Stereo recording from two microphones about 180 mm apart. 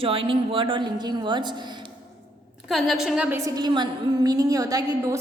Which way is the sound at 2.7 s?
Centre (ahead or behind).